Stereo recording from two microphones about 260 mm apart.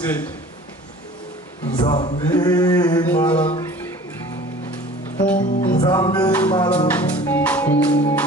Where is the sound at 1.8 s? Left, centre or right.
Centre.